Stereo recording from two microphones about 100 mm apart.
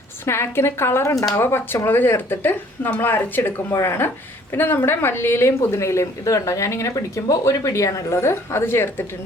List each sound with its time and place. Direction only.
0.3 s speech: 25° left (ahead or behind)